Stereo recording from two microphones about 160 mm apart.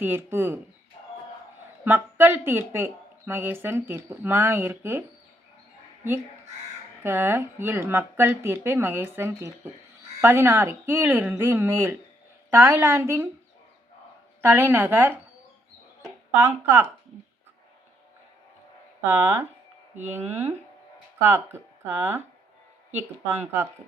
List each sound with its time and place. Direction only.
0.0 s speech: 15° right (ahead or behind)
1.8 s speech: 15° right (ahead or behind)
7.0 s speech: 15° right (ahead or behind)
14.4 s speech: 10° right (ahead or behind)
16.3 s speech: 15° right (ahead or behind)
19.0 s speech: 15° right (ahead or behind)